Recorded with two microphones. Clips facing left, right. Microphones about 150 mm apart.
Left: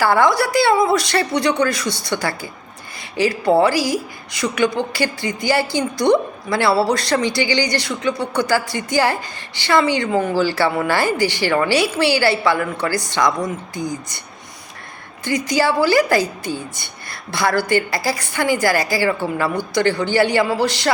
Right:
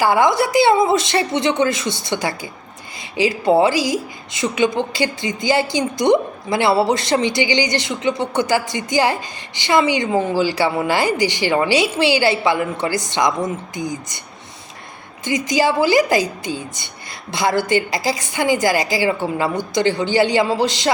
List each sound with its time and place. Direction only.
0.0 s a woman's voice: 15° right (ahead or behind)
15.2 s a woman's voice: 20° right (ahead or behind)